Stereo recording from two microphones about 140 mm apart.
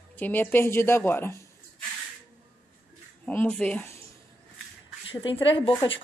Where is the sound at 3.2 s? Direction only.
10° left (ahead or behind).